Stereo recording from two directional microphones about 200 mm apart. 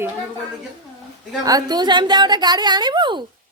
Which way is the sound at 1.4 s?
20° right (ahead or behind).